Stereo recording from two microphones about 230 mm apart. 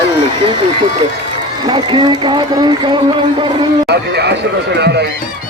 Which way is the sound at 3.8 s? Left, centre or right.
Right.